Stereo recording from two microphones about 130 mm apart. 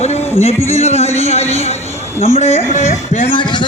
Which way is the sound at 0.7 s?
55° left (ahead or behind).